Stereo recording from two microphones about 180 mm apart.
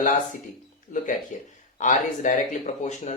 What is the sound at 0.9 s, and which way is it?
Speech, 45° left (ahead or behind).